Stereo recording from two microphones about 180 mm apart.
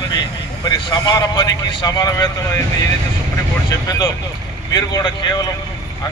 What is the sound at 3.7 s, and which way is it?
Speech, 20° left (ahead or behind).